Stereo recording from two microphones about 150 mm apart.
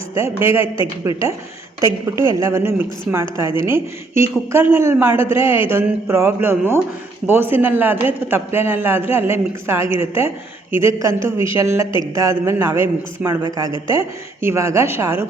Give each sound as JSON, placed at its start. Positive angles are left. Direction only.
{"t": 0.1, "sound": "a man's voice", "side_deg": -20}
{"t": 1.8, "sound": "a man's voice", "side_deg": -20}